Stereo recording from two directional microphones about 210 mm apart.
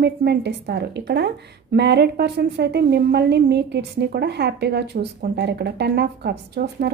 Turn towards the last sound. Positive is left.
turn(degrees=-50)  # may be behind; listen again after turning